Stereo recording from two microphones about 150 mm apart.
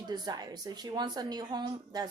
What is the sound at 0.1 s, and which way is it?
Speech, 25° right (ahead or behind).